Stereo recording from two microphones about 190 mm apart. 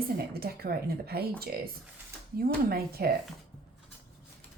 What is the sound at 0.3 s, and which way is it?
Speech, 55° right (ahead or behind).